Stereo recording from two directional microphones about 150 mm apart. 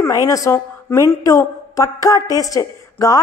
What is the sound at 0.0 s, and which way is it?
A woman's voice, 20° left (ahead or behind).